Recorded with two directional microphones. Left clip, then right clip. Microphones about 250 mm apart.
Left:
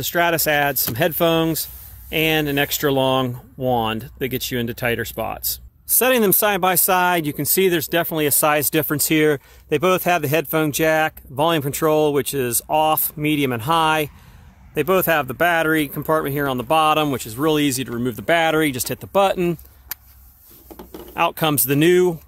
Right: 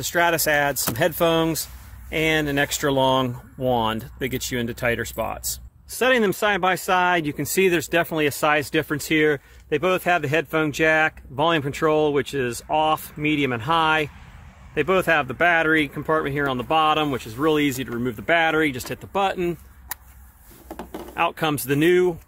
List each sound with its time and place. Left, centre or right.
0.0 s speech: left
21.1 s speech: left